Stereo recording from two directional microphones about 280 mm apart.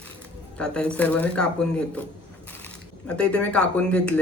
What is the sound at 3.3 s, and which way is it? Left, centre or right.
Speech, centre.